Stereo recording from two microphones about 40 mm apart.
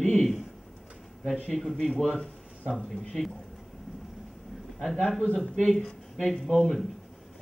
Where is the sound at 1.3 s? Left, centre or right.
Left.